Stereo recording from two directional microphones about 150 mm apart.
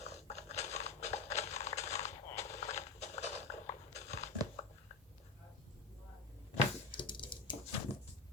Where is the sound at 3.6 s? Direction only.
45° left (ahead or behind).